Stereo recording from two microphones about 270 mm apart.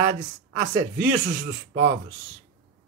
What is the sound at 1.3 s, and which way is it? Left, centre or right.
Speech, right.